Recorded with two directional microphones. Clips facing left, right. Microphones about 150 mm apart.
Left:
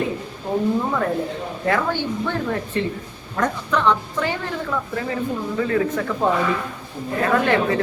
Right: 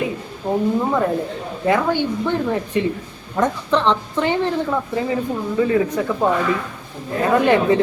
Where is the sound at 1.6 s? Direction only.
15° right (ahead or behind).